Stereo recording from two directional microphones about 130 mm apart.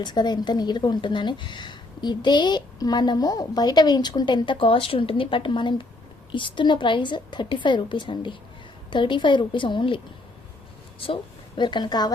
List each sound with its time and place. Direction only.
0.0 s speech: 35° left (ahead or behind)
11.0 s a woman's voice: 40° left (ahead or behind)